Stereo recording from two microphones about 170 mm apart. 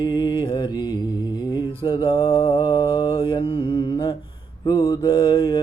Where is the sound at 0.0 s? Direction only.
25° left (ahead or behind).